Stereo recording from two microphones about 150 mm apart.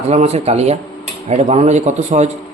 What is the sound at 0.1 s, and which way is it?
Speech, 45° right (ahead or behind).